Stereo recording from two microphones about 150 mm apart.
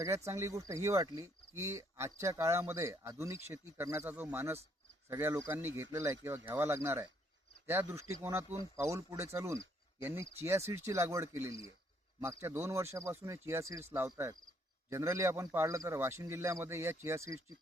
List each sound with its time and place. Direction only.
0.0 s speech: 20° right (ahead or behind)